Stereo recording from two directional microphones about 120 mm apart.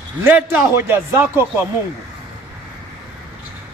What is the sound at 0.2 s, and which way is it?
A man's voice, 20° right (ahead or behind).